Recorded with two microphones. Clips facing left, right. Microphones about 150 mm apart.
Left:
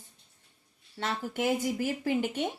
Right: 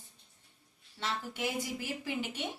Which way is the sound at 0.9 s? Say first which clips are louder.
Left 5 dB; 50° left (ahead or behind).